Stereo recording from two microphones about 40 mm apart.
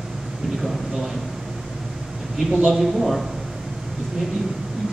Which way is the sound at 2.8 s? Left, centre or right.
Centre.